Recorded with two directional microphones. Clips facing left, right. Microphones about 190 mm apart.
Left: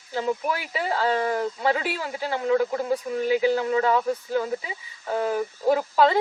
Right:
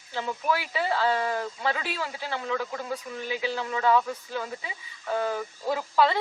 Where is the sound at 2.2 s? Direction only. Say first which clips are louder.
Left 10 dB; 35° left (ahead or behind).